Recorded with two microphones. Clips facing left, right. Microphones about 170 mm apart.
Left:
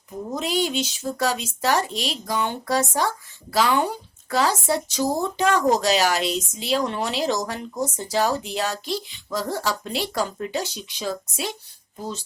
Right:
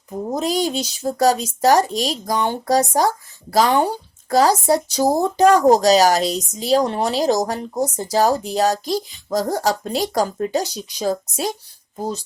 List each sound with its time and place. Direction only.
0.1 s speech: 40° right (ahead or behind)